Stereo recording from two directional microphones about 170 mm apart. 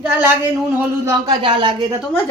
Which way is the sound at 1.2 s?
30° right (ahead or behind).